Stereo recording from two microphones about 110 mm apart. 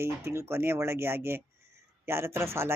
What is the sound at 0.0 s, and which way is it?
Speech, 25° right (ahead or behind).